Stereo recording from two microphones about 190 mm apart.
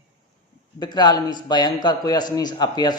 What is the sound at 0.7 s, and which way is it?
A man's voice, 20° left (ahead or behind).